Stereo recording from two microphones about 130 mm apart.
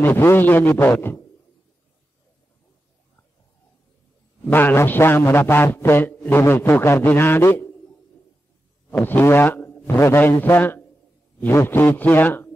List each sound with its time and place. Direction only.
0.0 s a man's voice: 15° left (ahead or behind)
4.5 s a man's voice: 15° left (ahead or behind)
8.9 s a man's voice: 15° left (ahead or behind)